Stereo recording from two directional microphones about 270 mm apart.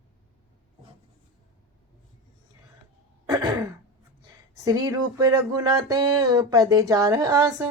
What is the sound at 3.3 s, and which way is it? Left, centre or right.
Throat clearing, centre.